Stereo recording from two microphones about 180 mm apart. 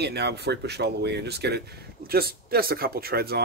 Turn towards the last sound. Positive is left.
turn(degrees=-60)  # may be behind; listen again after turning